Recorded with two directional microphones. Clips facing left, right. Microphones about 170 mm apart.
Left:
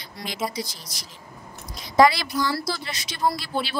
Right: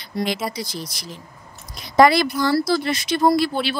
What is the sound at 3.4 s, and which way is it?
Speech, 70° right (ahead or behind).